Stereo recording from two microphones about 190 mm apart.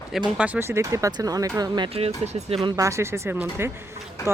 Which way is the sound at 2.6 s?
20° right (ahead or behind).